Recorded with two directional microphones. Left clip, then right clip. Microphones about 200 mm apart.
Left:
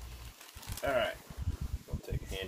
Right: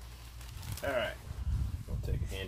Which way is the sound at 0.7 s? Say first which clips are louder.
Left 2 dB; 10° right (ahead or behind).